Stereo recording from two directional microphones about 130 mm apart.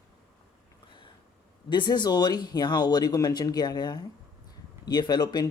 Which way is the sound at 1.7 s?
35° left (ahead or behind).